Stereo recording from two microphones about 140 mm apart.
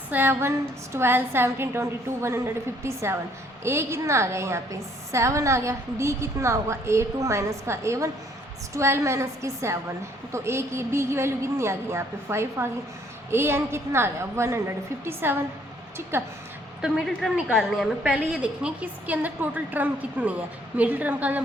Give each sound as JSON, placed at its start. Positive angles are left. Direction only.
{"t": 0.1, "sound": "a woman's voice", "side_deg": -15}
{"t": 16.8, "sound": "a woman's voice", "side_deg": 0}